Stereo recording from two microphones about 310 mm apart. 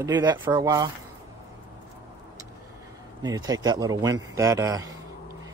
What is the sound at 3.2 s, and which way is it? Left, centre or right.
A man's voice, centre.